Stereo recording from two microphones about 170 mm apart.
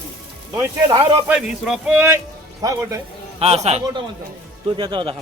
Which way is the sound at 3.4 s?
40° right (ahead or behind).